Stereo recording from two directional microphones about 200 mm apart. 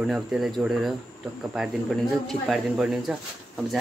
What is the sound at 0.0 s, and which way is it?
Speech, centre (ahead or behind).